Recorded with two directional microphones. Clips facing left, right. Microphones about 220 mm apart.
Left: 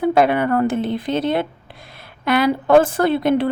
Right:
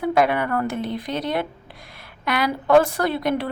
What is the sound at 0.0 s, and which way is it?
A woman's voice, 30° left (ahead or behind).